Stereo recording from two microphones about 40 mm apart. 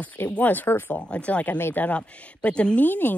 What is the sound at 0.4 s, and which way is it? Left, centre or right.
Speech, left.